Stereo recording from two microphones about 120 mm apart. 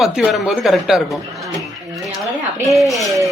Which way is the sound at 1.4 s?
25° right (ahead or behind).